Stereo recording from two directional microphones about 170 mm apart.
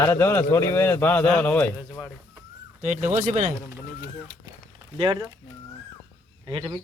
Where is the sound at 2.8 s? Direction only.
45° right (ahead or behind).